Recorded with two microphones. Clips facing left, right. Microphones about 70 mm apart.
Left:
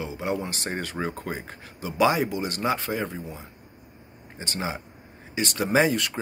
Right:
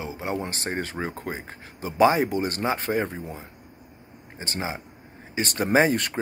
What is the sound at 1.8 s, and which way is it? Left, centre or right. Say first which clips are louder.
Speech: right 3 dB; right.